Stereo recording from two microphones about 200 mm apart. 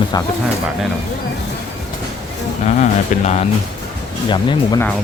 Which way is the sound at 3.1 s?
40° left (ahead or behind).